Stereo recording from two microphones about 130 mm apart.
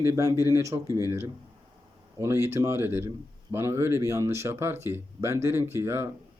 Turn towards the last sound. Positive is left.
turn(degrees=-20)  # may be behind; listen again after turning